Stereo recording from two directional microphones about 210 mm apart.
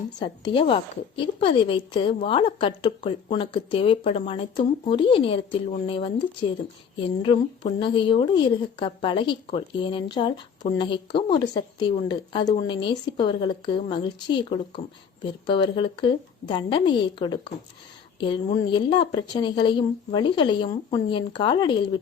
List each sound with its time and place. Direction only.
0.2 s a woman's voice: 20° left (ahead or behind)
7.2 s a woman's voice: 25° left (ahead or behind)